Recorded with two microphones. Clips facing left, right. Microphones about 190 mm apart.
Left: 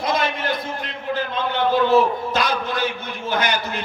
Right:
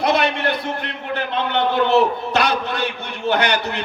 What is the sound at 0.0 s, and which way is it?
A man's voice, 70° right (ahead or behind).